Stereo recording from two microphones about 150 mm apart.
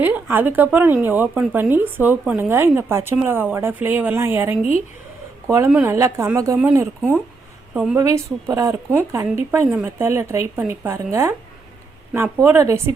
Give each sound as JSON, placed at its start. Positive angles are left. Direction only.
{"t": 0.0, "sound": "speech", "side_deg": -15}
{"t": 7.9, "sound": "speech", "side_deg": -20}